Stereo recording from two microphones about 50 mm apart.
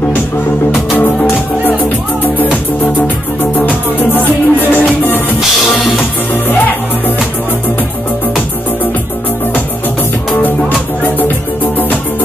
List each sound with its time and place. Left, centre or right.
2.2 s music: left